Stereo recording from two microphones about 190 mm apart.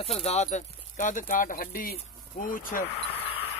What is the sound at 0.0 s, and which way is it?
Speech, 35° left (ahead or behind).